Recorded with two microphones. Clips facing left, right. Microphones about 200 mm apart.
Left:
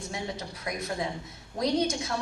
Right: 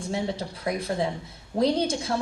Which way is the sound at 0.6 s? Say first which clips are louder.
Right 6 dB; 30° right (ahead or behind).